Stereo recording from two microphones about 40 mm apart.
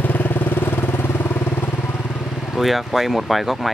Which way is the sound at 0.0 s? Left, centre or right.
Left.